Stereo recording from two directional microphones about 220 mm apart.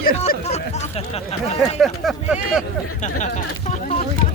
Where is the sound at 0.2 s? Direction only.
30° left (ahead or behind).